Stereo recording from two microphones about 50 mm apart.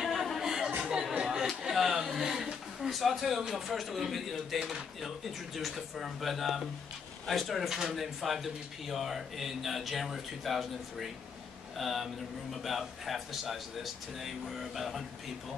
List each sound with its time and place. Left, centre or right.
0.0 s chatter: centre
0.7 s chatter: right
1.2 s chatter: centre
1.6 s speech: centre